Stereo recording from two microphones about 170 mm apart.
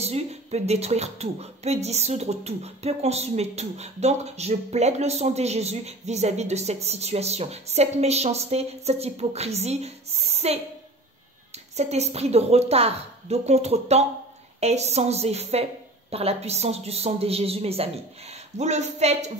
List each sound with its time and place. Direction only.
0.0 s speech: 40° right (ahead or behind)
11.7 s speech: 40° right (ahead or behind)